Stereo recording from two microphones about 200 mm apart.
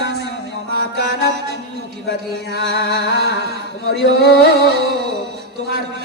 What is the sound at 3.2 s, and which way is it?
Chant, 55° right (ahead or behind).